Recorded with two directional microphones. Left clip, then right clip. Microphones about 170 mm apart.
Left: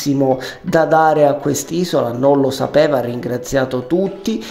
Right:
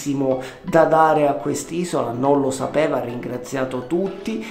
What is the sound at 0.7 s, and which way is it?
Speech, 25° left (ahead or behind).